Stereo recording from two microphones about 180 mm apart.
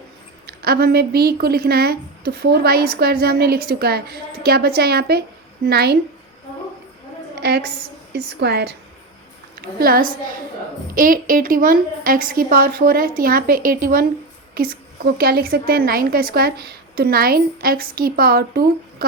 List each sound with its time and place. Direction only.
0.4 s a woman's voice: 60° right (ahead or behind)
7.3 s a sound: 65° right (ahead or behind)
8.1 s a woman's voice: 65° right (ahead or behind)
9.6 s a woman's voice: 55° right (ahead or behind)